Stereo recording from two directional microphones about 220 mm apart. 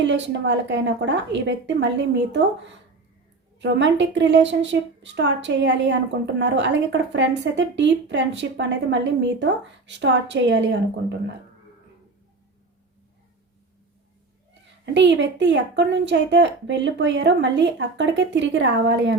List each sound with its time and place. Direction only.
0.0 s a woman's voice: 55° right (ahead or behind)
14.9 s a woman's voice: 55° right (ahead or behind)